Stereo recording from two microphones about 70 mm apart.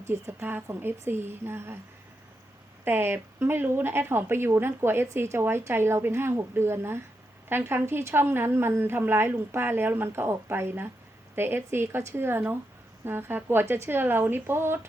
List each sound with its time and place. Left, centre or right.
0.1 s speech: right
2.8 s speech: right